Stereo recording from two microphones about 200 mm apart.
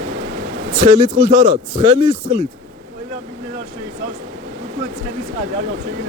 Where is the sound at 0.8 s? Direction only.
30° right (ahead or behind).